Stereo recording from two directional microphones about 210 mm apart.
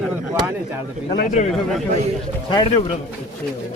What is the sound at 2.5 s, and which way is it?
Speech, 20° left (ahead or behind).